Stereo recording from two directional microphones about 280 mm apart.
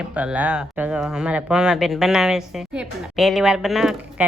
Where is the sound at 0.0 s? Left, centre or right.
Centre.